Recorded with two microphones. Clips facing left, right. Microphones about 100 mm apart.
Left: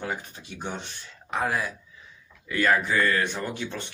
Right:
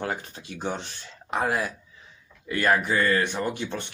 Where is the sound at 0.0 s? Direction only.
40° right (ahead or behind).